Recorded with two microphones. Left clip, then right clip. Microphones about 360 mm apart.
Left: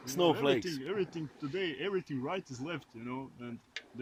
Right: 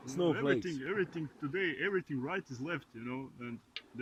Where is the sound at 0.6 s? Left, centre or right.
Centre.